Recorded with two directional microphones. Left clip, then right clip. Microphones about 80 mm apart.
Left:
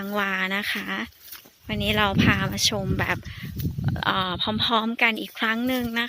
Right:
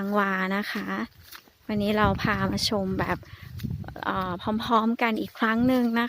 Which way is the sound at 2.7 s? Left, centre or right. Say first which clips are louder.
Left 1 dB; right.